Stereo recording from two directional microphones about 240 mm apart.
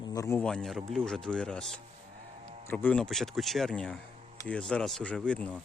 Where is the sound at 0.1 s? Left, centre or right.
Centre.